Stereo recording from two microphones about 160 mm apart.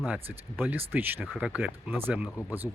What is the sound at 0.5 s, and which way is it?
Speech, 10° right (ahead or behind).